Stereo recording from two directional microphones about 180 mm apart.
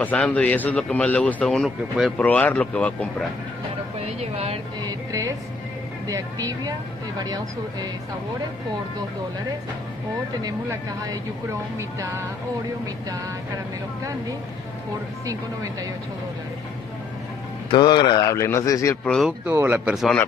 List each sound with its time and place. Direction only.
0.0 s a man's voice: 10° left (ahead or behind)
4.0 s a woman's voice: 35° right (ahead or behind)
4.8 s a sound: 20° right (ahead or behind)
6.0 s speech: 20° right (ahead or behind)
15.2 s speech: 20° right (ahead or behind)
17.6 s a man's voice: 25° left (ahead or behind)
19.0 s speech: centre (ahead or behind)
19.4 s speech: 10° right (ahead or behind)